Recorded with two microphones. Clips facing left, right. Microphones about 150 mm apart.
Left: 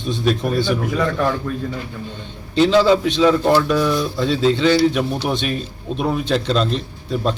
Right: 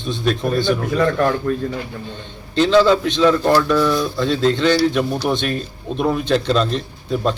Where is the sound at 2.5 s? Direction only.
5° left (ahead or behind).